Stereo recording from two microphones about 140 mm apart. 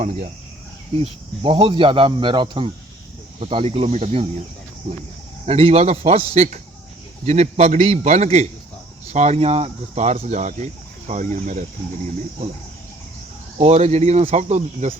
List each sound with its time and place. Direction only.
0.0 s speech: 60° right (ahead or behind)
0.9 s speech: 40° right (ahead or behind)
5.5 s speech: 45° right (ahead or behind); by 11.6 s 65° right (ahead or behind)
13.6 s speech: 50° right (ahead or behind)